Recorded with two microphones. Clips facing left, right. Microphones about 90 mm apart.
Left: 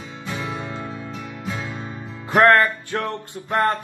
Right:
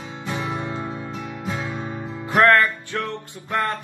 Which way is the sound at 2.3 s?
30° left (ahead or behind).